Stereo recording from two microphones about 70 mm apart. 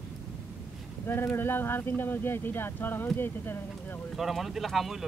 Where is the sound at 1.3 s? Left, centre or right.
Left.